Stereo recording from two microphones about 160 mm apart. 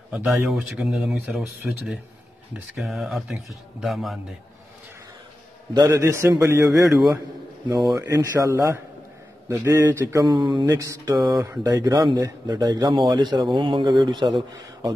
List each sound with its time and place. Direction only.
0.1 s a man's voice: 10° right (ahead or behind)
5.7 s speech: 20° right (ahead or behind)
7.7 s speech: 25° right (ahead or behind)